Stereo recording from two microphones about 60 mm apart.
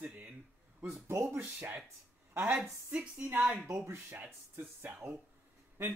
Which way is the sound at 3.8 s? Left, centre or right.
Right.